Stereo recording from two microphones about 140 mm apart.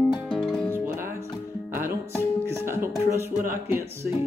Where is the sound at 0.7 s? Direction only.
15° right (ahead or behind).